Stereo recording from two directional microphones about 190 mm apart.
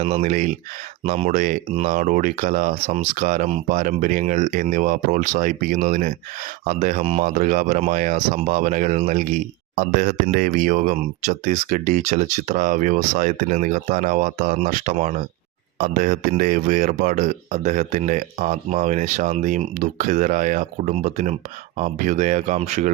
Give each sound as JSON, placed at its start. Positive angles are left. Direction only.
{"t": 0.0, "sound": "speech", "side_deg": -35}